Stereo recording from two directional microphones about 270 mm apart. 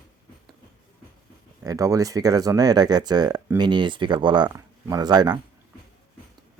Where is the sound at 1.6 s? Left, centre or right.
Centre.